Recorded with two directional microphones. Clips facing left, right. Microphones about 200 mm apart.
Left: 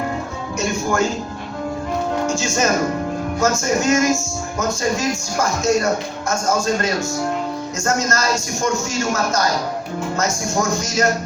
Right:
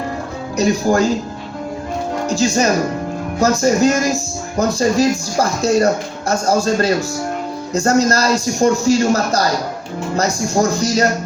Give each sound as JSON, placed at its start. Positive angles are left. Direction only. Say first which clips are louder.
{"t": 0.5, "sound": "speech", "louder": "right 6 dB", "side_deg": -35}
{"t": 2.2, "sound": "music", "louder": "right 4 dB", "side_deg": -35}
{"t": 3.4, "sound": "speech", "louder": "right 6 dB", "side_deg": -35}